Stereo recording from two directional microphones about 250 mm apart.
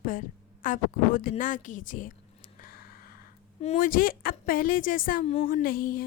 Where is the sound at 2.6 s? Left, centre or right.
Left.